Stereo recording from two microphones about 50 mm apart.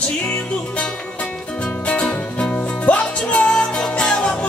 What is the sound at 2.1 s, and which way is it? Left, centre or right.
Music, left.